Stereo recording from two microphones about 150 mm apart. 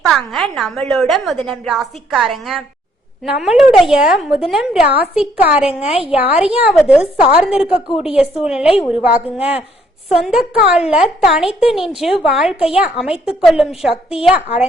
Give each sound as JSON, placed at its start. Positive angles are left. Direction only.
{"t": 0.0, "sound": "a woman's voice", "side_deg": 0}
{"t": 5.8, "sound": "a woman's voice", "side_deg": 40}
{"t": 6.1, "sound": "a woman's voice", "side_deg": -10}